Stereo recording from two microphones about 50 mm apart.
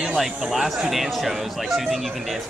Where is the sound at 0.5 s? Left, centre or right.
Centre.